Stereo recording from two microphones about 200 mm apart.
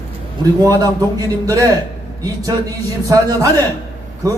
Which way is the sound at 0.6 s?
15° right (ahead or behind).